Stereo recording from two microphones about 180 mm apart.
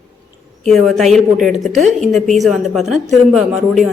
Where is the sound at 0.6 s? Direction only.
Centre (ahead or behind).